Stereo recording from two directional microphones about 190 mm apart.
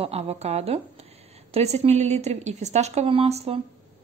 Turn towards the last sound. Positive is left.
turn(degrees=-30)  # may be behind; listen again after turning